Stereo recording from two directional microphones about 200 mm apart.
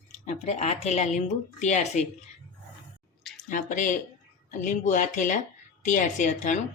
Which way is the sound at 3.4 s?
40° left (ahead or behind).